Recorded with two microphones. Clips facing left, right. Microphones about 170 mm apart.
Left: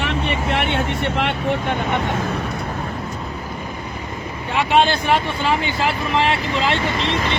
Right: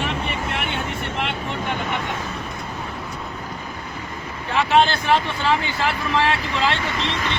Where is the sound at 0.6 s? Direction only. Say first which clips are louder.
Left 6 dB; 75° left (ahead or behind).